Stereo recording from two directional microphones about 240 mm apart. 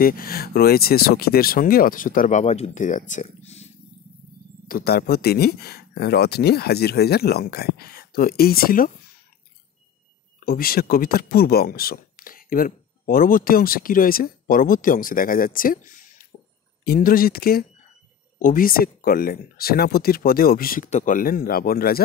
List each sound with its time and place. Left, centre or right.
0.0 s speech: left
4.6 s speech: left
10.4 s speech: left